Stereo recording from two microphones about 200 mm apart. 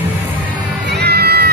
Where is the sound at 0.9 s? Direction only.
55° right (ahead or behind).